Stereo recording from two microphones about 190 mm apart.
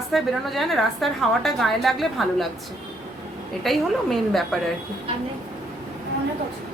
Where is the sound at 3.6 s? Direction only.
Centre (ahead or behind).